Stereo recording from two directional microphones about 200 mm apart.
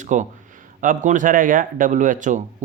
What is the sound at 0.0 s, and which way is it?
Speech, 40° right (ahead or behind).